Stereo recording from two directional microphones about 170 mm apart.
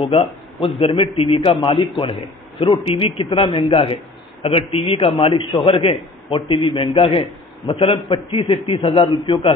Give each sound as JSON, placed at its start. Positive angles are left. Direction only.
{"t": 0.0, "sound": "a man's voice", "side_deg": 30}